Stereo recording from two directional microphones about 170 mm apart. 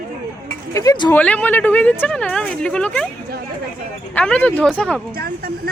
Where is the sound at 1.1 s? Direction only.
10° left (ahead or behind).